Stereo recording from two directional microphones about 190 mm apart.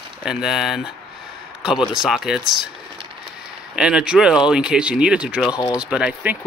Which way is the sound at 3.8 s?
5° right (ahead or behind).